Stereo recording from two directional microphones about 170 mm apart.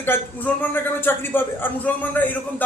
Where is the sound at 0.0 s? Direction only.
10° left (ahead or behind).